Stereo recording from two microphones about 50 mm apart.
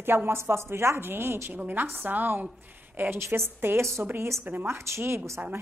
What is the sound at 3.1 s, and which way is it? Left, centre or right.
Speech, right.